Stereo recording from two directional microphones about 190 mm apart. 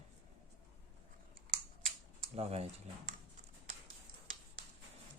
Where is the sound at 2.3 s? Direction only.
30° right (ahead or behind).